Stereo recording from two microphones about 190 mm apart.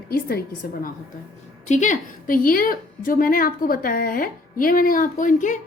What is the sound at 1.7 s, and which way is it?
A woman's voice, 40° left (ahead or behind).